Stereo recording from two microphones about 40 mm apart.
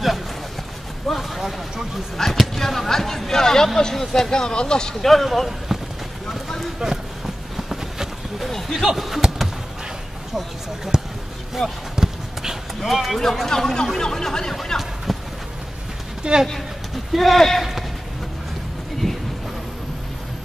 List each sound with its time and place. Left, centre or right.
1.0 s a sound: centre
2.3 s speech: centre
5.0 s speech: centre
6.8 s speech: centre
7.5 s a sound: centre
8.5 s speech: centre
10.9 s speech: centre
11.6 s speech: centre
11.9 s basketball bounce: centre
12.8 s speech: centre
14.5 s a sound: centre
16.2 s speech: right
17.1 s speech: centre
19.0 s a sound: centre